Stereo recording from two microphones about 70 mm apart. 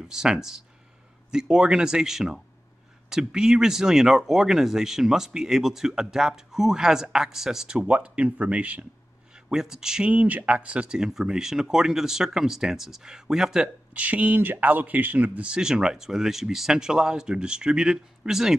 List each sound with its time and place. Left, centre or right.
0.1 s speech: centre
9.3 s speech: centre
10.1 s speech: right
13.9 s speech: right